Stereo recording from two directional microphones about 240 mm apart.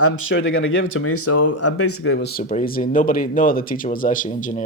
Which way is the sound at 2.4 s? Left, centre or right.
Left.